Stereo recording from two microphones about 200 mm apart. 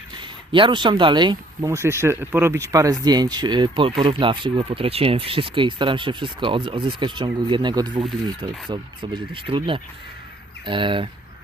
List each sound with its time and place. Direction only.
0.5 s speech: 25° right (ahead or behind)